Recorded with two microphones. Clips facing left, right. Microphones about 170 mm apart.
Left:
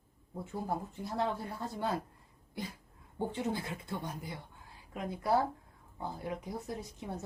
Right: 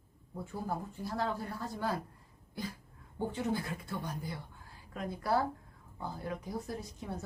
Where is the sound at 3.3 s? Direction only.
25° left (ahead or behind).